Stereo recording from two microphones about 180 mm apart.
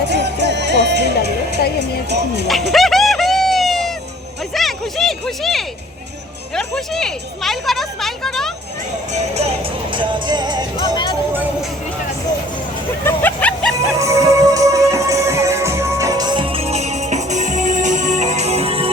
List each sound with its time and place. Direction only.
0.1 s music: 75° right (ahead or behind)
2.5 s music: centre (ahead or behind)
6.6 s speech: 5° left (ahead or behind)
9.9 s speech: 25° right (ahead or behind)
10.9 s music: 25° left (ahead or behind)
13.1 s a sound: 10° left (ahead or behind)
13.9 s music: 15° right (ahead or behind); by 18.9 s 30° right (ahead or behind)